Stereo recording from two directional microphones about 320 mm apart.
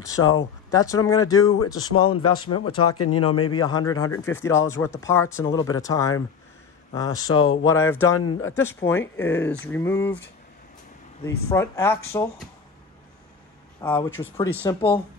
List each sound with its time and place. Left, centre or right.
0.2 s speech: left
0.7 s speech: centre
1.8 s speech: left
3.5 s speech: centre
7.3 s speech: left
7.6 s speech: centre
8.2 s speech: left
8.5 s speech: centre
11.2 s speech: centre
13.7 s speech: centre
14.2 s speech: centre